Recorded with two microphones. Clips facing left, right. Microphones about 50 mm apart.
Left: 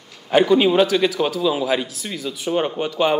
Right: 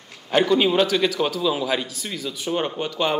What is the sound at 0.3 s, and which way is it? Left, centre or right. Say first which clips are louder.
A man's voice: left 3 dB; centre.